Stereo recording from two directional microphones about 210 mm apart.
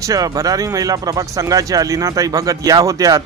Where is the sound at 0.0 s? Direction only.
15° right (ahead or behind).